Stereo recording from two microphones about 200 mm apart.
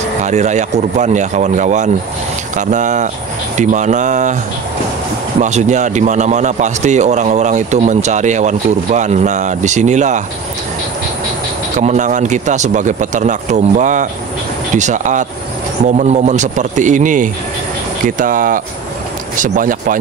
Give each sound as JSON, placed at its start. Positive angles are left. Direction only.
{"t": 0.2, "sound": "a man's voice", "side_deg": -35}
{"t": 5.4, "sound": "a man's voice", "side_deg": -35}
{"t": 11.8, "sound": "a man's voice", "side_deg": -35}